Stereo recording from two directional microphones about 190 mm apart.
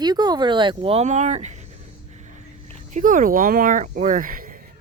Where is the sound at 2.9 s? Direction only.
45° right (ahead or behind).